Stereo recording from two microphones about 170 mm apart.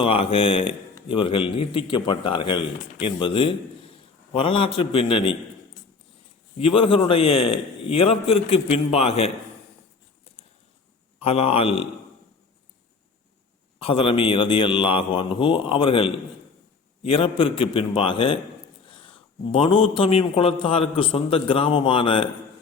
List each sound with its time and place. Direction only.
0.0 s a man's voice: 30° left (ahead or behind)
6.6 s a man's voice: 30° left (ahead or behind)
11.2 s a man's voice: 35° left (ahead or behind)
13.8 s a man's voice: 30° left (ahead or behind)